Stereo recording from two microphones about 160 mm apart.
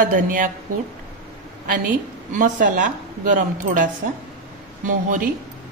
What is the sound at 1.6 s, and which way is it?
A woman's voice, 55° right (ahead or behind).